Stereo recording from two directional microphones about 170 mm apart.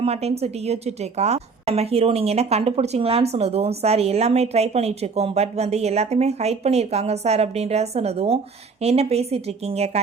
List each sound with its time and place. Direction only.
0.0 s a woman's voice: 40° right (ahead or behind)